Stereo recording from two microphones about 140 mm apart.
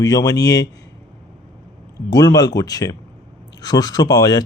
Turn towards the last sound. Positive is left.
turn(degrees=25)  # may be behind; listen again after turning